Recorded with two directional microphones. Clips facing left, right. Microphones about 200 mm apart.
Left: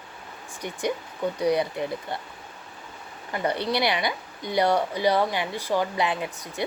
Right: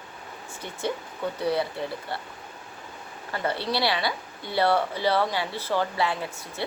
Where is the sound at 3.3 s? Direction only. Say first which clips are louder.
Left 2 dB; 15° left (ahead or behind).